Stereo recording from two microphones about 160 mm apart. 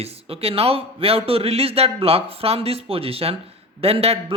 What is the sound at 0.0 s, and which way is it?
A man's voice, 35° right (ahead or behind).